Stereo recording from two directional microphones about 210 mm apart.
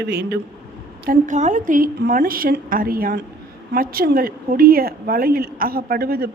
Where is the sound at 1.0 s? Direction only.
40° right (ahead or behind).